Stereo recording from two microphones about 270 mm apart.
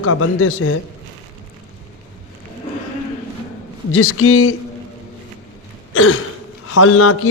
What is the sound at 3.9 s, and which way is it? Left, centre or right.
Speech, left.